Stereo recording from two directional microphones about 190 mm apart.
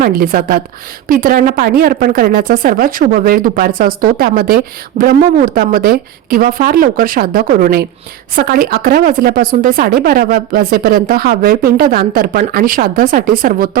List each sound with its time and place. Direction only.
0.0 s speech: 50° right (ahead or behind)